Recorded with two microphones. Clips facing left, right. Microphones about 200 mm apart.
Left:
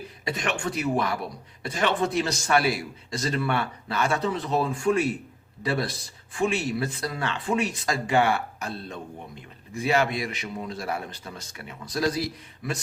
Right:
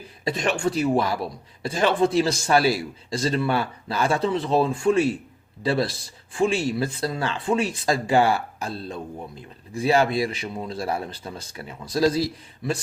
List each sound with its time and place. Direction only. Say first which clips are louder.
0.3 s speech: right 5 dB; 30° right (ahead or behind)